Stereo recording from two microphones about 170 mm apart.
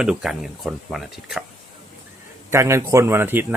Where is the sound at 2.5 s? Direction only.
15° right (ahead or behind).